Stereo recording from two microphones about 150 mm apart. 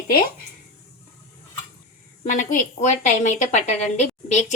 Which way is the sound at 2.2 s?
60° left (ahead or behind).